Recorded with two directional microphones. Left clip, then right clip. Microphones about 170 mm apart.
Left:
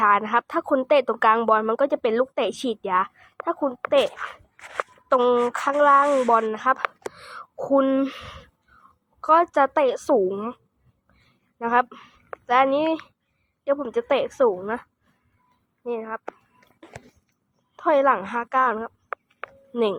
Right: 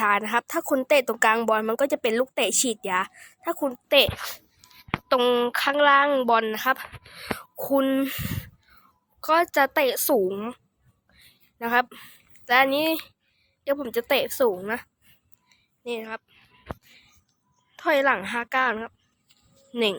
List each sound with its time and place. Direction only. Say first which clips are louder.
0.0 s a woman's voice: left 3 dB; 45° right (ahead or behind)
11.2 s a sound: left 3 dB; 45° right (ahead or behind)
13.7 s a woman's voice: left 2 dB; 45° right (ahead or behind)
15.9 s a woman's voice: left 3 dB; 45° right (ahead or behind)
17.7 s speech: left 3 dB; 40° right (ahead or behind)